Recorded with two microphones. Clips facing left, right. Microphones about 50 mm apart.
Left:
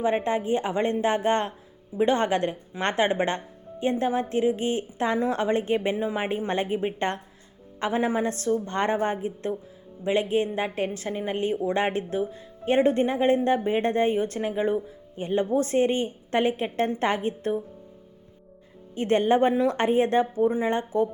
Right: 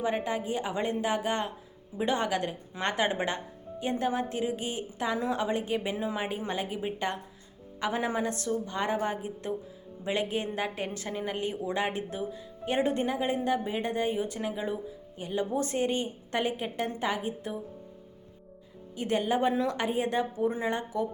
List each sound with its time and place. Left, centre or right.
0.0 s a woman's voice: left
6.0 s a woman's voice: left
7.8 s a woman's voice: left
8.6 s a woman's voice: left
9.0 s a woman's voice: left
13.2 s a woman's voice: left
14.3 s a woman's voice: left
16.7 s a woman's voice: left
18.9 s a woman's voice: left
20.4 s a woman's voice: left
20.7 s a woman's voice: left